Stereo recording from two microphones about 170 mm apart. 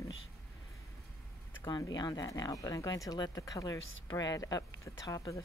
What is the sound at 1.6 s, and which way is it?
Speech, 20° left (ahead or behind).